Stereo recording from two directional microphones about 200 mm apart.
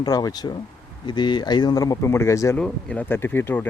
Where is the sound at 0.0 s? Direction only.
20° left (ahead or behind).